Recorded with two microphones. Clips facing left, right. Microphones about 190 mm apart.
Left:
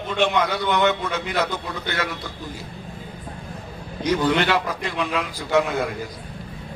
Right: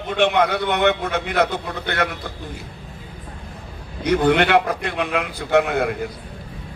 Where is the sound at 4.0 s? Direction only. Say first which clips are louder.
Right 3 dB; 60° right (ahead or behind).